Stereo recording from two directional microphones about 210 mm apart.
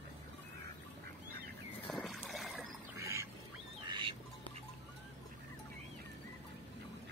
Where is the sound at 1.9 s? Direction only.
Centre (ahead or behind).